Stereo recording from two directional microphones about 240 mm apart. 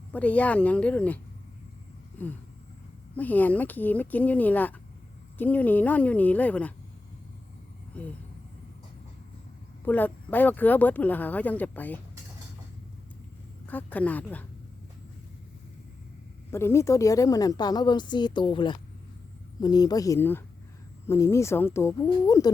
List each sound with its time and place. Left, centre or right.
0.1 s speech: centre
3.2 s a woman's voice: centre
9.8 s a woman's voice: centre
13.7 s a woman's voice: centre
16.5 s a woman's voice: centre